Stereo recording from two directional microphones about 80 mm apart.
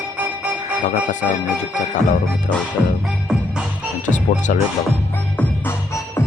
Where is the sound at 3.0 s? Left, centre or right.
Centre.